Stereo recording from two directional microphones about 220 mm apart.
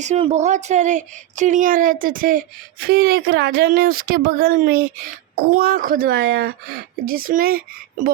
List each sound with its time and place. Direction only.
0.0 s speech: 30° right (ahead or behind)